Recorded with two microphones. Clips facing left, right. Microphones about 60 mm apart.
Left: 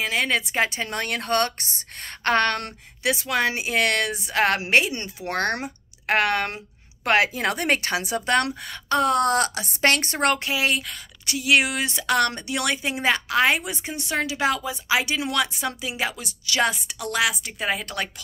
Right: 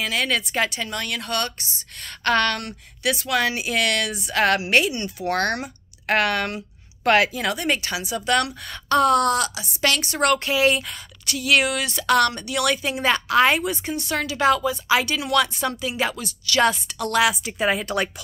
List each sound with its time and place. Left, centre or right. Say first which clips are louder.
0.0 s a woman's voice: even; left
0.8 s speech: left 2 dB; left
2.2 s a woman's voice: even; left
7.3 s speech: left 1 dB; left
8.3 s a woman's voice: right 1 dB; left
8.6 s speech: right 3 dB; centre
9.3 s speech: left 1 dB; left
10.1 s a woman's voice: right 2 dB; left
10.4 s a woman's voice: right 4 dB; centre
11.2 s a woman's voice: even; centre
13.1 s speech: right 3 dB; centre
15.1 s a woman's voice: right 4 dB; left
15.4 s a woman's voice: right 3 dB; centre